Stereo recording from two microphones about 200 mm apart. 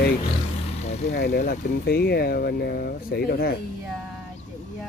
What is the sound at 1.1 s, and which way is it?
Speech, 50° left (ahead or behind).